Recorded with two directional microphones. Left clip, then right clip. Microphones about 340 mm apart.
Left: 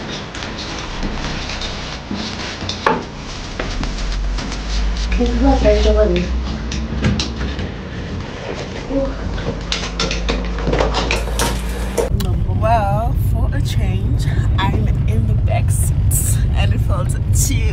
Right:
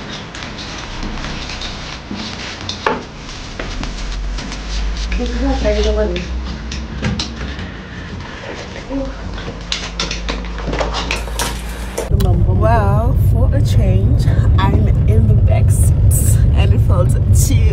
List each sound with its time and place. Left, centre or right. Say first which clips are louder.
2.6 s chopping: left 1 dB; centre
5.1 s speech: left 4 dB; centre
7.0 s a sound: left 1 dB; centre
9.7 s a sound: right 1 dB; centre
14.1 s speech: right 2 dB; centre
16.1 s vehicle: right 2 dB; centre